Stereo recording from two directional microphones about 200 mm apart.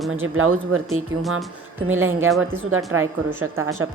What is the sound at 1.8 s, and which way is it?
Speech, 85° right.